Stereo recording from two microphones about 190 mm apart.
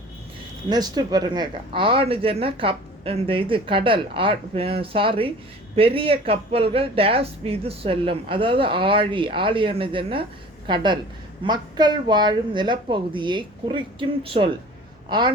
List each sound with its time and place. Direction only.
0.7 s speech: 20° right (ahead or behind)
11.4 s speech: 25° right (ahead or behind)